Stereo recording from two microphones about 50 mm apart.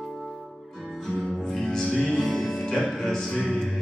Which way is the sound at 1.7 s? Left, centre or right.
Centre.